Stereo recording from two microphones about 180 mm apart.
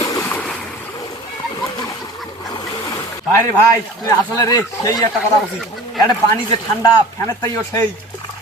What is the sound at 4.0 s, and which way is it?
Speech, 20° left (ahead or behind).